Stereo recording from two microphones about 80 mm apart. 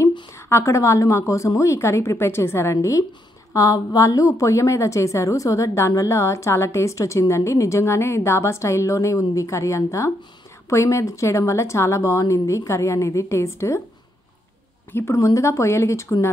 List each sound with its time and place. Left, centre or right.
0.3 s a woman's voice: left
14.9 s a woman's voice: left